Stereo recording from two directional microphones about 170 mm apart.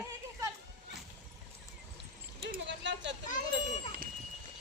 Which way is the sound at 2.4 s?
80° right.